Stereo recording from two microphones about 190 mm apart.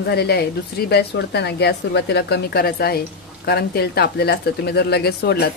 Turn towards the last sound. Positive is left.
turn(degrees=55)  # may be behind; listen again after turning